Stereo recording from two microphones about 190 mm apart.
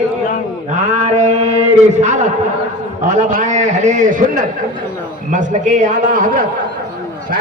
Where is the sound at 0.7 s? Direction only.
40° right (ahead or behind).